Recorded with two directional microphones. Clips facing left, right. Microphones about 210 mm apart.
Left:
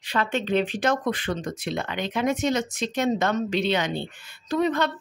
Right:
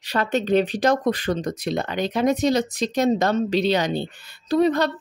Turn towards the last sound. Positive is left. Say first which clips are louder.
# right 4 dB
turn(degrees=-35)  # may be behind; listen again after turning